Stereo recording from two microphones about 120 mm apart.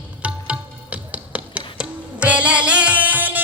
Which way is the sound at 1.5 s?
10° right (ahead or behind).